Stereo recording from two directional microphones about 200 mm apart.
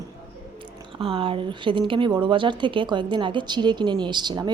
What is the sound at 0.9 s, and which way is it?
Speech, 25° right (ahead or behind).